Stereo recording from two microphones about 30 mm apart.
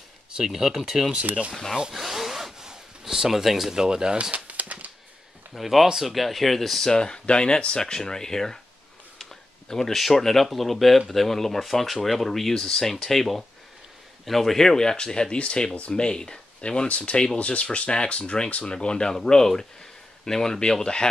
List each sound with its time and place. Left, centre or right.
0.5 s speech: centre
1.9 s wood: centre
2.6 s a sound: centre
3.7 s speech: right
4.3 s bird: right
5.5 s speech: centre
6.9 s speech: left
9.2 s a sound: centre
9.9 s speech: centre; by 15.3 s left
15.3 s speech: left
15.9 s speech: left
16.8 s speech: left
19.2 s speech: centre